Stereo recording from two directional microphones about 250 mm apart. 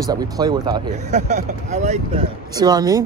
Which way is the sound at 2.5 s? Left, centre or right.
Centre.